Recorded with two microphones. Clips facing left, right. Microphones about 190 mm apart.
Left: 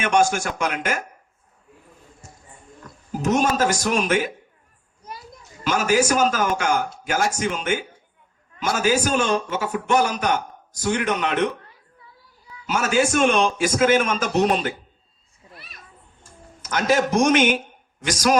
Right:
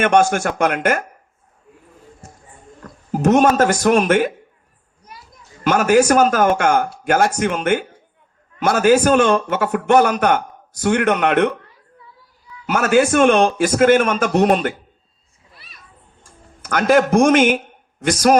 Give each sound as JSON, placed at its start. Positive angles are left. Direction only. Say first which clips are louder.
{"t": 0.0, "sound": "a man's voice", "louder": "right 5 dB", "side_deg": -55}
{"t": 2.8, "sound": "speech", "louder": "right 7 dB", "side_deg": -55}
{"t": 5.6, "sound": "a man's voice", "louder": "right 6 dB", "side_deg": -55}
{"t": 12.6, "sound": "a man's voice", "louder": "right 6 dB", "side_deg": -60}
{"t": 16.6, "sound": "a man's voice", "louder": "right 6 dB", "side_deg": -55}